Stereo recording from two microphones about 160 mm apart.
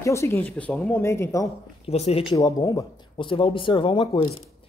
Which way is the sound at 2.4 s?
25° left (ahead or behind).